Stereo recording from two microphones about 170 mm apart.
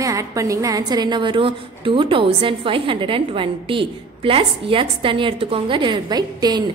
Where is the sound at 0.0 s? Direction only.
20° right (ahead or behind).